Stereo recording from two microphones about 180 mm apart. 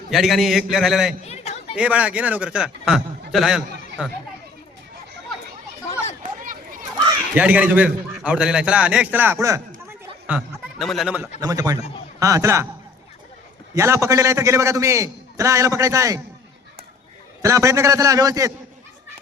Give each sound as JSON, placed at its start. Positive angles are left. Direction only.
{"t": 0.1, "sound": "a man's voice", "side_deg": 0}
{"t": 1.2, "sound": "chatter", "side_deg": 35}
{"t": 1.7, "sound": "a man's voice", "side_deg": -5}
{"t": 6.4, "sound": "a sound", "side_deg": -50}
{"t": 7.3, "sound": "a man's voice", "side_deg": -10}
{"t": 10.2, "sound": "speech", "side_deg": -5}
{"t": 11.2, "sound": "a man's voice", "side_deg": -20}
{"t": 13.7, "sound": "a man's voice", "side_deg": -15}
{"t": 17.4, "sound": "a man's voice", "side_deg": -15}